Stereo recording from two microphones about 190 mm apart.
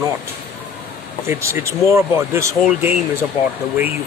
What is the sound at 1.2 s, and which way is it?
Speech, 15° right (ahead or behind).